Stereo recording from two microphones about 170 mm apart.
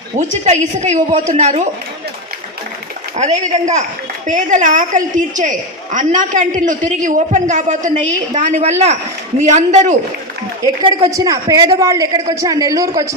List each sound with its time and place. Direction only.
0.2 s a woman's voice: 45° right (ahead or behind)
3.2 s a man's voice: 40° right (ahead or behind)
11.1 s a woman's voice: 20° right (ahead or behind)